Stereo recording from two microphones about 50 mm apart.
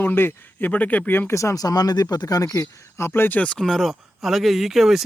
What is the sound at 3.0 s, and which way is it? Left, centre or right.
Speech, left.